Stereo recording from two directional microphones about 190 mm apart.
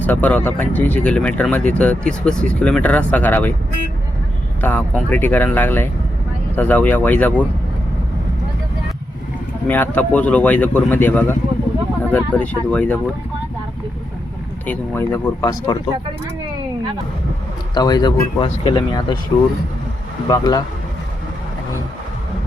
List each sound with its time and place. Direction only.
0.0 s speech: 10° left (ahead or behind)
4.6 s speech: 10° left (ahead or behind)
9.6 s speech: 10° left (ahead or behind)
14.7 s speech: 10° left (ahead or behind)
17.7 s speech: 20° left (ahead or behind)
20.2 s speech: 20° left (ahead or behind)